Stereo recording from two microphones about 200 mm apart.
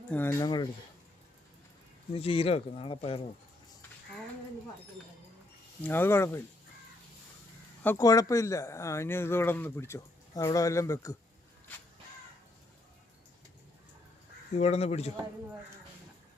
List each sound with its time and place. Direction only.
0.1 s speech: 10° left (ahead or behind)
2.1 s speech: 30° left (ahead or behind)
5.8 s speech: 10° left (ahead or behind)
7.9 s speech: 15° left (ahead or behind)
14.5 s speech: 35° left (ahead or behind)